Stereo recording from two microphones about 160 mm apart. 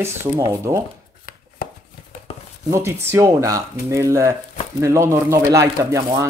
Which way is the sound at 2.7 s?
15° right (ahead or behind).